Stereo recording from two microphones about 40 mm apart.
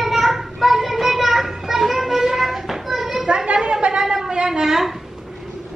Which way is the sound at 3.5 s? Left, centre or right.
Right.